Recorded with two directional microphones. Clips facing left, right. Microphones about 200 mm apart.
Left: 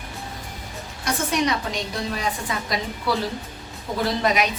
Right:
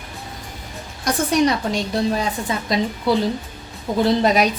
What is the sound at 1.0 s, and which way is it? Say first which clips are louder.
A woman's voice: right 5 dB; 35° right (ahead or behind).